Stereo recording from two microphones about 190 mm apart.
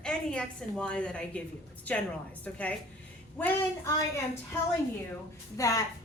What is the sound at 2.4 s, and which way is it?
Speech, 10° left (ahead or behind).